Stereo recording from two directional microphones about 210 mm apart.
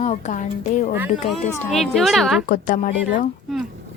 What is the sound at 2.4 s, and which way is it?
Speech, 40° left (ahead or behind).